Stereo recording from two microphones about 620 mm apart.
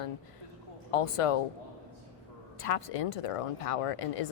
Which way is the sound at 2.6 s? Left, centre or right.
Left.